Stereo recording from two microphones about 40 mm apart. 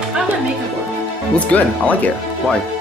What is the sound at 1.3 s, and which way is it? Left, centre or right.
Speech, left.